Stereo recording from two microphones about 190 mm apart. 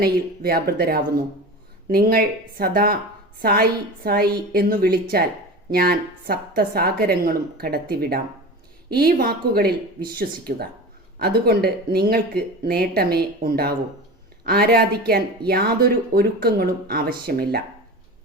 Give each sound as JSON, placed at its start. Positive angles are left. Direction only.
{"t": 0.0, "sound": "a woman's voice", "side_deg": -50}